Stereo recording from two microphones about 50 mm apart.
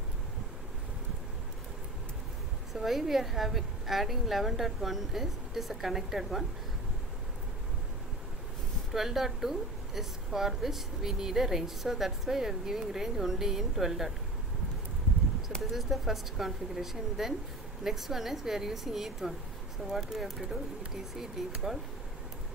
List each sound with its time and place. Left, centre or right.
2.7 s a woman's voice: centre
8.9 s a woman's voice: centre
15.7 s a woman's voice: centre